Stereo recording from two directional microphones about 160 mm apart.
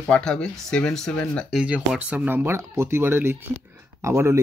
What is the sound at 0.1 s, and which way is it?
Speech, 5° left (ahead or behind).